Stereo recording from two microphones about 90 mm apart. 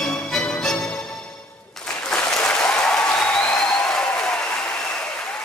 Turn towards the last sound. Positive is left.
turn(degrees=10)  # may be behind; listen again after turning